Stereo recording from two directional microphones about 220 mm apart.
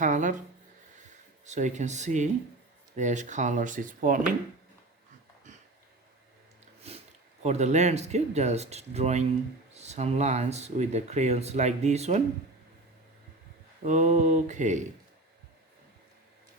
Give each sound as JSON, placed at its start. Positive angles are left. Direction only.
{"t": 0.0, "sound": "speech", "side_deg": -35}
{"t": 1.5, "sound": "speech", "side_deg": -35}
{"t": 6.8, "sound": "a sound", "side_deg": -25}
{"t": 7.4, "sound": "speech", "side_deg": -30}
{"t": 13.8, "sound": "speech", "side_deg": -35}